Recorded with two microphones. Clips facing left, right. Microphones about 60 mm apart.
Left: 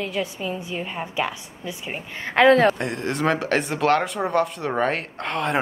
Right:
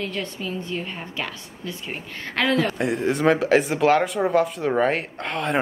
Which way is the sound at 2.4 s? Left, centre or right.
Left.